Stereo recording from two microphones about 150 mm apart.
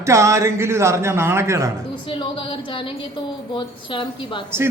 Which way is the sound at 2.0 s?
30° left (ahead or behind).